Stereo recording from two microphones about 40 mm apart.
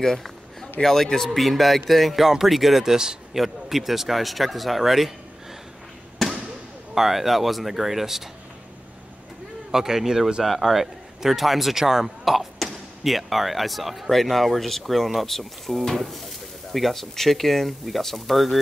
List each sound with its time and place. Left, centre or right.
0.0 s a sound: centre
0.8 s speech: centre
6.9 s speech: centre
9.7 s speech: centre